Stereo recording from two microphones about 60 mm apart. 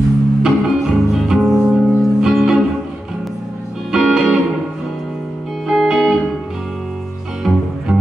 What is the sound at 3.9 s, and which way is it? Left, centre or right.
Music, centre.